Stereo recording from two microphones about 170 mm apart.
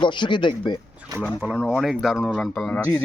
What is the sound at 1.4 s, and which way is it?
Speech, 5° right (ahead or behind).